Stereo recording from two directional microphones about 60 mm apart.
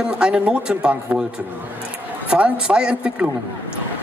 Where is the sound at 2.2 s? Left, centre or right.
Centre.